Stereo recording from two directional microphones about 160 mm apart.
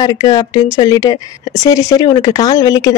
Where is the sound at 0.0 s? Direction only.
25° left (ahead or behind).